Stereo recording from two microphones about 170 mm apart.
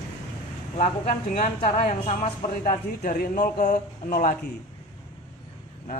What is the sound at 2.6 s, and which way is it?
A man's voice, 55° left (ahead or behind).